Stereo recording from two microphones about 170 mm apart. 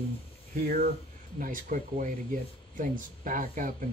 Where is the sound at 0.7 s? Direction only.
55° right (ahead or behind).